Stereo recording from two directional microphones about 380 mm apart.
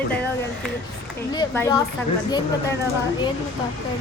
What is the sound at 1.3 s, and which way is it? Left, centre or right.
Speech, centre.